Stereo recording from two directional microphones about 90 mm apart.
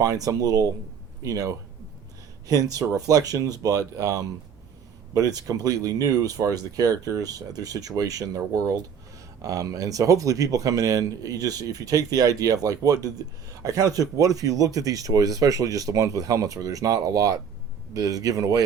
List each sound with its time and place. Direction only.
0.0 s speech: 40° right (ahead or behind)